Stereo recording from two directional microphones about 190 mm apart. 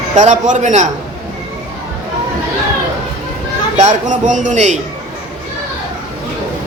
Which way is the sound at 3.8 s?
40° right (ahead or behind).